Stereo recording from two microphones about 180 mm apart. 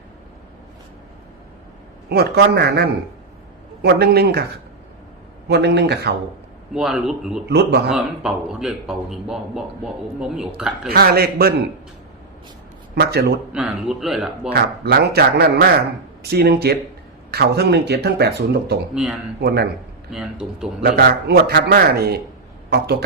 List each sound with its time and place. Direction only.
2.0 s speech: 65° right (ahead or behind)
5.5 s a man's voice: 70° right (ahead or behind)
6.7 s a man's voice: 5° right (ahead or behind)
7.4 s a man's voice: 65° right (ahead or behind)
7.9 s a man's voice: 5° right (ahead or behind)
10.8 s speech: 55° right (ahead or behind)
12.9 s speech: 60° right (ahead or behind)
13.5 s a man's voice: 5° right (ahead or behind)
14.5 s speech: 60° right (ahead or behind)
18.9 s a man's voice: 5° right (ahead or behind)
19.4 s speech: 60° right (ahead or behind)
20.1 s a man's voice: 5° right (ahead or behind)
20.8 s speech: 60° right (ahead or behind)